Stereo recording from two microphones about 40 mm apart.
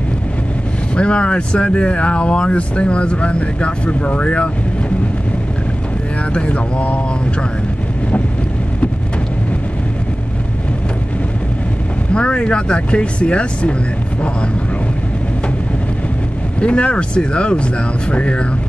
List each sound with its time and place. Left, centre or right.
0.9 s speech: left
6.3 s speech: left
12.1 s speech: left
16.6 s speech: left